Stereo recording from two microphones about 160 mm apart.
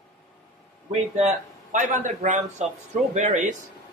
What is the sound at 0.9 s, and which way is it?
A man's voice, 45° right (ahead or behind).